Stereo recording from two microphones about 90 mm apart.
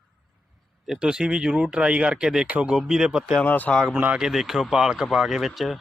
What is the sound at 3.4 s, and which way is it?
Speech, 20° left (ahead or behind).